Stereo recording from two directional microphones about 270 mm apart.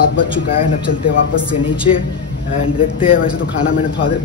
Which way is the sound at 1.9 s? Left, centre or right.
Left.